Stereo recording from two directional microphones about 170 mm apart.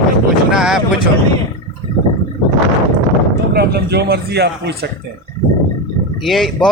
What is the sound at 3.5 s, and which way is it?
Speech, 70° right (ahead or behind).